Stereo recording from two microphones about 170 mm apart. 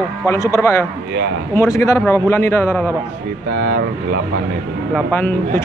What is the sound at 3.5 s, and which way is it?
Speech, 80° right.